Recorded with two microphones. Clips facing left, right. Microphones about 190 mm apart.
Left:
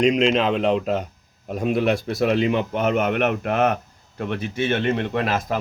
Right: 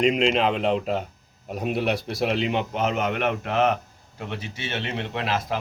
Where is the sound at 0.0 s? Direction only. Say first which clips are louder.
Left 3 dB; 40° left (ahead or behind).